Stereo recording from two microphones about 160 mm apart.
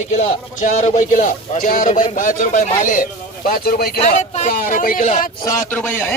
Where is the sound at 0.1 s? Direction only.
45° left (ahead or behind); by 3.9 s 75° left (ahead or behind).